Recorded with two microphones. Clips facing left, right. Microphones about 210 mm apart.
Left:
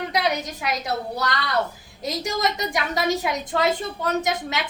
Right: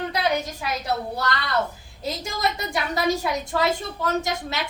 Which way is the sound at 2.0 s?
15° left (ahead or behind).